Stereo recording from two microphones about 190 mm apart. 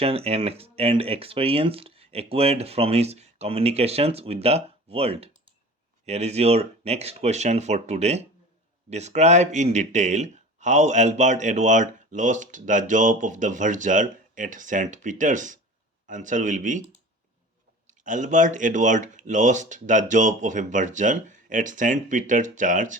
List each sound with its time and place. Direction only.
0.0 s speech: 30° right (ahead or behind)
18.0 s speech: 40° right (ahead or behind)